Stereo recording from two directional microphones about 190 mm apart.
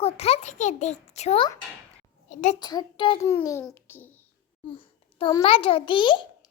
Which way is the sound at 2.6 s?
20° left (ahead or behind).